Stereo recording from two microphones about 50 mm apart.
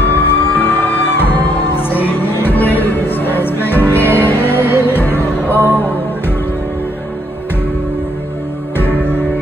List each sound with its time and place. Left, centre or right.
0.0 s music: left